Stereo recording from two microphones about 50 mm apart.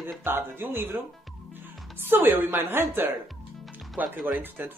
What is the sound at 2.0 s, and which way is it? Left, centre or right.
Speech, right.